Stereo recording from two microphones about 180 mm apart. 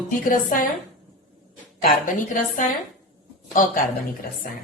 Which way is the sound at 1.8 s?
45° left (ahead or behind).